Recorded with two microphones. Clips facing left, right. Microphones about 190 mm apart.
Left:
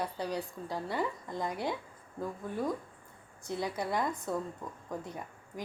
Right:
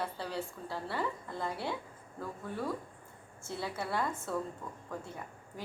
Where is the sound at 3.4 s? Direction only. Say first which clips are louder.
Left 3 dB; 15° left (ahead or behind).